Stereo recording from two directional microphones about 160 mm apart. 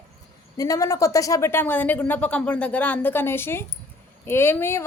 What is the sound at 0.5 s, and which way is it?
Speech, 20° left (ahead or behind).